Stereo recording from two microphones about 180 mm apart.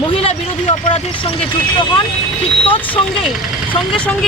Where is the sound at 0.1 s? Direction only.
35° left (ahead or behind).